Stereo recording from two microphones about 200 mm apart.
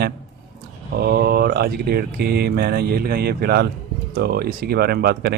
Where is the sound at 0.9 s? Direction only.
50° right (ahead or behind).